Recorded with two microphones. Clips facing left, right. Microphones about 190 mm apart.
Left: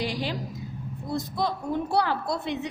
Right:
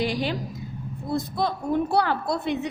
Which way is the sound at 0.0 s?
55° right (ahead or behind).